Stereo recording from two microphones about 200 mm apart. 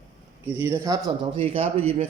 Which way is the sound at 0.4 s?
15° right (ahead or behind).